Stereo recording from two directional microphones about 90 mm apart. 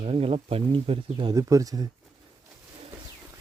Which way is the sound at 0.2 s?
90° right.